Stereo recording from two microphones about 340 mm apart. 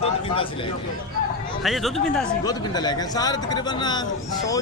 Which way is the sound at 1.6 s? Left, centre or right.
Centre.